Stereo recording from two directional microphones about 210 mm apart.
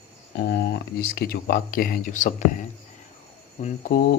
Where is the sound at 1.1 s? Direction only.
50° left (ahead or behind).